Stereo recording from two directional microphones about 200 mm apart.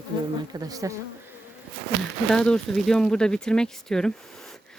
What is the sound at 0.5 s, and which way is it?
Speech, 20° right (ahead or behind).